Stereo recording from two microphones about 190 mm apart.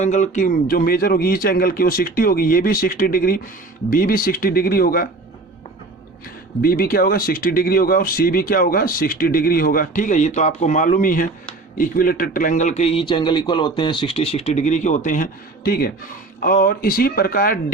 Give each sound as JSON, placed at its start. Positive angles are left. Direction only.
{"t": 0.0, "sound": "speech", "side_deg": 40}
{"t": 6.6, "sound": "a man's voice", "side_deg": 50}